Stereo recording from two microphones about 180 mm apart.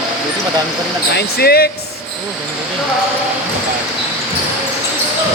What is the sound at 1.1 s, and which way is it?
Speech, 60° left (ahead or behind).